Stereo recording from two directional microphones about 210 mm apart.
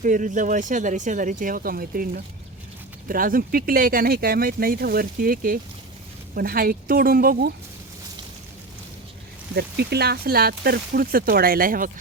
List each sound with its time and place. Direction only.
0.0 s speech: 35° right (ahead or behind)
9.6 s speech: 50° right (ahead or behind)